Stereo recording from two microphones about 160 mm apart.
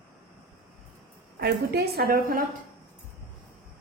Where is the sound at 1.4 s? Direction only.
75° right (ahead or behind).